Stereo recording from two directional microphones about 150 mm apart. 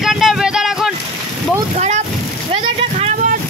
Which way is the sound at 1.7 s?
50° right (ahead or behind).